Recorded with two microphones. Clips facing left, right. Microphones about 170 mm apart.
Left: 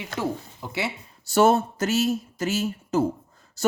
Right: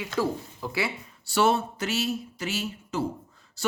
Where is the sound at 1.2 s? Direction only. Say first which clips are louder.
Left 5 dB; 45° left (ahead or behind).